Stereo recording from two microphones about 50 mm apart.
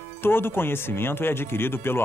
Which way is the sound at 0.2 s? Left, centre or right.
Left.